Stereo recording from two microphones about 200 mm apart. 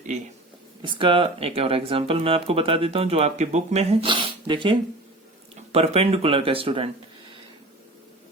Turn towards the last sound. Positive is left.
turn(degrees=-25)  # may be behind; listen again after turning